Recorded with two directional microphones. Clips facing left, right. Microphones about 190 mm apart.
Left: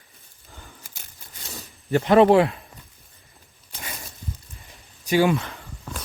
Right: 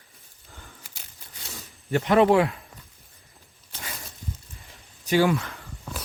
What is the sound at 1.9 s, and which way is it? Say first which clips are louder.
Speech: left 3 dB; 35° left (ahead or behind).